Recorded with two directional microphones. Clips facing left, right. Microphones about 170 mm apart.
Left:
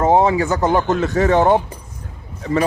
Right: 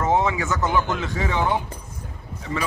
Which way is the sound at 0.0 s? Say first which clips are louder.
Left 7 dB; 35° left (ahead or behind).